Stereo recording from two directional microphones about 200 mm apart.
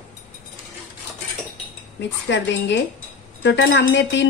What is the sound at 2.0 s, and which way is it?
Speech, 60° left (ahead or behind).